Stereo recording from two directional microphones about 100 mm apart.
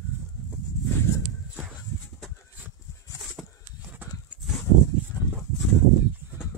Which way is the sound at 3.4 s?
5° left (ahead or behind).